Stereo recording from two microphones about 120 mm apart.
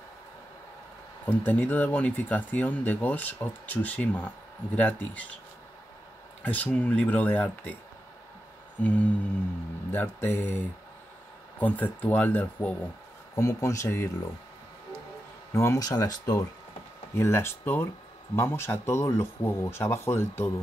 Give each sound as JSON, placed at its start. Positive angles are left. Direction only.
{"t": 1.2, "sound": "speech", "side_deg": 15}
{"t": 6.4, "sound": "speech", "side_deg": 10}
{"t": 8.8, "sound": "speech", "side_deg": 10}
{"t": 11.6, "sound": "speech", "side_deg": 15}
{"t": 13.4, "sound": "speech", "side_deg": 25}
{"t": 15.5, "sound": "speech", "side_deg": 25}
{"t": 17.1, "sound": "speech", "side_deg": 20}